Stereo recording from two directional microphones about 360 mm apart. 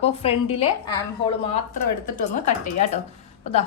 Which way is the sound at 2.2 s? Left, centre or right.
Centre.